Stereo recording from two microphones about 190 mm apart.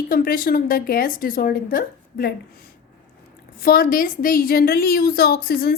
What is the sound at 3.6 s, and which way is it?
A woman's voice, 50° left (ahead or behind).